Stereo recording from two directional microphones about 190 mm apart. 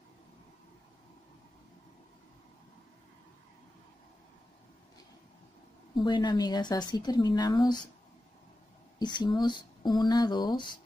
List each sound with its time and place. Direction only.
6.0 s speech: 20° left (ahead or behind)
9.0 s speech: 25° left (ahead or behind)